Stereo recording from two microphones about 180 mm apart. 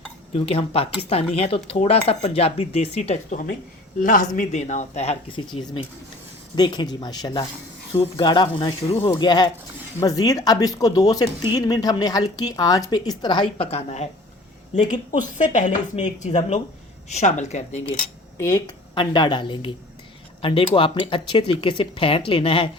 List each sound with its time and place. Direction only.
0.3 s speech: 30° left (ahead or behind)
5.5 s speech: 25° left (ahead or behind)
15.2 s speech: 45° left (ahead or behind)
18.3 s speech: 20° left (ahead or behind)